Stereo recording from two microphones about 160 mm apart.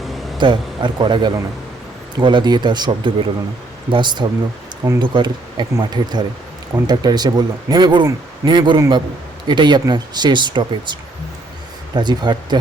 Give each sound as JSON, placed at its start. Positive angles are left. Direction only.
{"t": 0.3, "sound": "speech", "side_deg": -30}
{"t": 11.9, "sound": "speech", "side_deg": -25}